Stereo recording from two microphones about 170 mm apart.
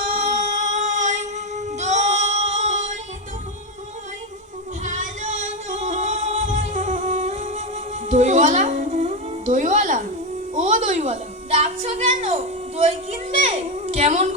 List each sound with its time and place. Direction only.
0.1 s child singing: 40° right (ahead or behind)
4.8 s music: 45° right (ahead or behind)
13.5 s a child's voice: 35° right (ahead or behind)